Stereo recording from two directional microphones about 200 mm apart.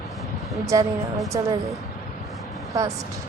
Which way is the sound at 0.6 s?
15° right (ahead or behind).